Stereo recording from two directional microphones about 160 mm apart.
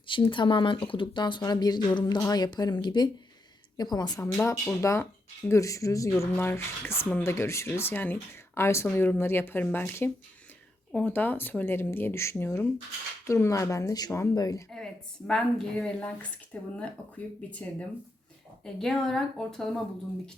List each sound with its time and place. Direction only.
0.1 s speech: 30° left (ahead or behind)
15.3 s speech: 5° left (ahead or behind)